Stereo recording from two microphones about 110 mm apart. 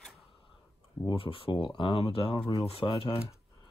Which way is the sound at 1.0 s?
55° left (ahead or behind).